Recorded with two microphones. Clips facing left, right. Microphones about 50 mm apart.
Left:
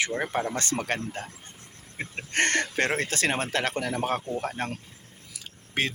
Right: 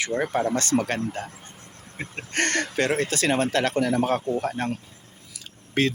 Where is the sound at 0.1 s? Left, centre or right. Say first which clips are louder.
Right 4 dB; centre.